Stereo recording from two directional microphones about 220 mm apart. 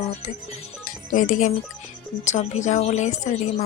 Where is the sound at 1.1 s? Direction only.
35° left (ahead or behind).